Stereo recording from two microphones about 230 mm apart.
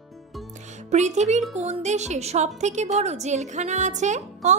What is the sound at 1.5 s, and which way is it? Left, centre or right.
A woman's voice, right.